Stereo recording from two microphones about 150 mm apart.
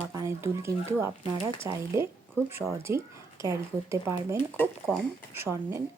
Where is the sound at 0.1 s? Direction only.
20° right (ahead or behind).